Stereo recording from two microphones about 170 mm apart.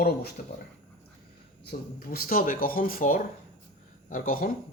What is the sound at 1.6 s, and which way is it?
Speech, 60° left (ahead or behind).